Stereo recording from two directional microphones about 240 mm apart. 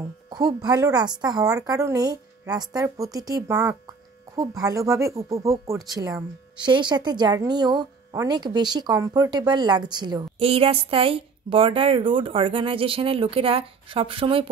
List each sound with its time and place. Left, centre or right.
0.3 s a woman's voice: centre